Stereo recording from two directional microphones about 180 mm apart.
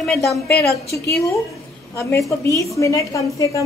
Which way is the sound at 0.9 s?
15° left (ahead or behind).